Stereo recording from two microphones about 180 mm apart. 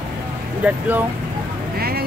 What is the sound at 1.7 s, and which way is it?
Vehicle, 60° right (ahead or behind).